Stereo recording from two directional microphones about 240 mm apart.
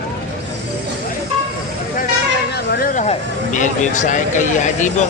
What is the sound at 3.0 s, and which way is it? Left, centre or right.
Speech, left.